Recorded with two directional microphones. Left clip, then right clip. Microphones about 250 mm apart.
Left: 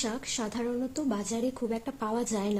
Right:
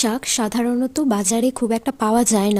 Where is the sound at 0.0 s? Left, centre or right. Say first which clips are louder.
Right 12 dB; right.